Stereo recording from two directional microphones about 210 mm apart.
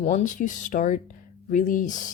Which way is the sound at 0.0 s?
35° left (ahead or behind).